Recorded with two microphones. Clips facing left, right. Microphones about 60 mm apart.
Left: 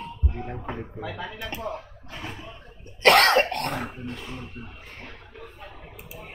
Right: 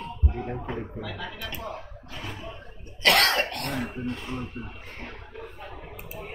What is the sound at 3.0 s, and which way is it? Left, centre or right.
Cough, left.